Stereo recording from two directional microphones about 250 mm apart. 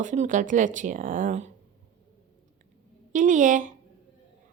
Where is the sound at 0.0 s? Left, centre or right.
Right.